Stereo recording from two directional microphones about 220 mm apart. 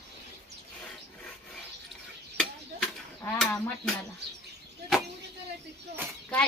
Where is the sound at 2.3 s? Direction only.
Centre (ahead or behind).